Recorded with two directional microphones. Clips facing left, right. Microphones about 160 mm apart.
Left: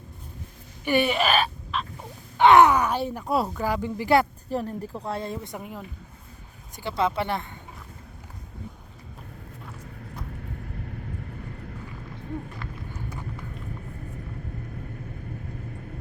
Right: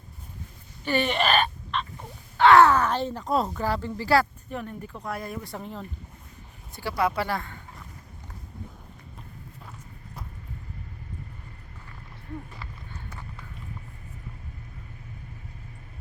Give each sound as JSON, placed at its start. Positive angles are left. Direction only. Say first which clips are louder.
{"t": 0.9, "sound": "speech", "louder": "left 2 dB", "side_deg": 10}
{"t": 2.4, "sound": "speech", "louder": "left 1 dB", "side_deg": 15}
{"t": 4.4, "sound": "a woman's voice", "louder": "left 6 dB", "side_deg": 35}
{"t": 5.5, "sound": "speech", "louder": "even", "side_deg": 10}
{"t": 6.7, "sound": "speech", "louder": "left 1 dB", "side_deg": 20}
{"t": 12.9, "sound": "horse", "louder": "left 6 dB", "side_deg": 10}